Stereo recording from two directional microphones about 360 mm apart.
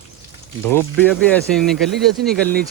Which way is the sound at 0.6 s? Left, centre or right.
Centre.